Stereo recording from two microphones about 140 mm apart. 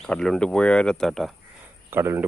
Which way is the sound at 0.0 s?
5° left (ahead or behind).